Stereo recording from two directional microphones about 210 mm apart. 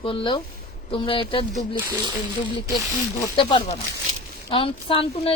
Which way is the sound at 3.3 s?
25° left (ahead or behind).